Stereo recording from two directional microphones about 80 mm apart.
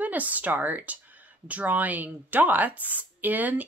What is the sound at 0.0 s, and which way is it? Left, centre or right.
Speech, centre.